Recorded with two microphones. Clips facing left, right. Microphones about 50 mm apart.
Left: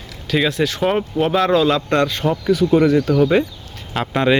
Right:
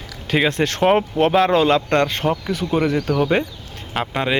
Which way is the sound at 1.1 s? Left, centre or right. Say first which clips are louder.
Right 1 dB; centre.